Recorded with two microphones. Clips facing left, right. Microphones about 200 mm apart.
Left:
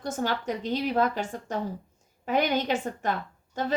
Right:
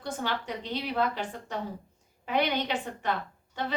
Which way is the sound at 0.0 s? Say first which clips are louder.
Left 4 dB; 45° left (ahead or behind).